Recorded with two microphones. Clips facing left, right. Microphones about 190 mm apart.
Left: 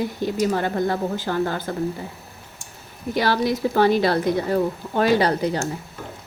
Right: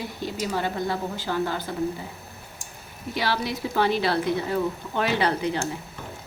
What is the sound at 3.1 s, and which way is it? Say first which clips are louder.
Speech: left 6 dB; 45° left (ahead or behind).